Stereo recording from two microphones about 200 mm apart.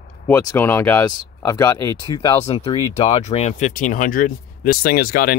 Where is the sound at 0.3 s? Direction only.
10° left (ahead or behind).